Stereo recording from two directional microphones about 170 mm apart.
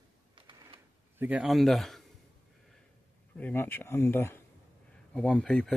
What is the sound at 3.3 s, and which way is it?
Speech, 10° left (ahead or behind).